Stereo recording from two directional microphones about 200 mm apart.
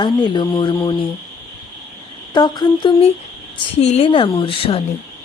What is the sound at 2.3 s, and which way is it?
Speech, 20° left (ahead or behind).